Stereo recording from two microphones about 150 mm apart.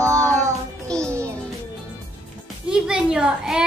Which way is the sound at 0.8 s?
5° left (ahead or behind).